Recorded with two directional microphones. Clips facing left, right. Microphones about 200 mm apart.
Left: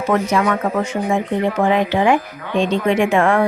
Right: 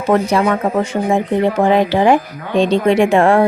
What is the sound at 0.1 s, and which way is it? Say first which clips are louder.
Speech: right 4 dB; 35° right (ahead or behind).